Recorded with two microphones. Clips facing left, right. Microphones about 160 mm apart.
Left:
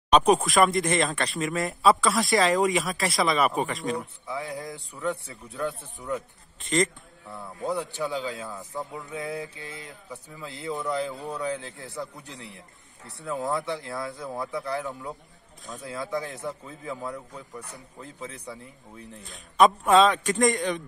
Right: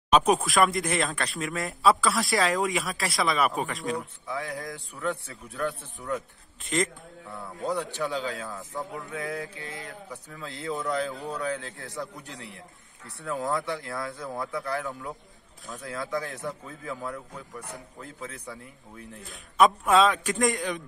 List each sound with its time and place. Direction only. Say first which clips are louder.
0.1 s speech: left 2 dB; centre (ahead or behind)
4.4 s a man's voice: left 1 dB; 20° left (ahead or behind)
6.7 s speech: left 3 dB; centre (ahead or behind)
7.9 s a man's voice: even; 20° left (ahead or behind)
8.5 s speech: even; centre (ahead or behind)
8.9 s a man's voice: even; 20° left (ahead or behind)
14.2 s speech: left 1 dB; centre (ahead or behind)
14.5 s a man's voice: left 1 dB; 20° left (ahead or behind)
19.3 s speech: left 1 dB; centre (ahead or behind)